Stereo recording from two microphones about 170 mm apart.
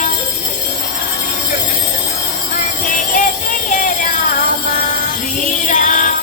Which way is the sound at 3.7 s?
50° left (ahead or behind).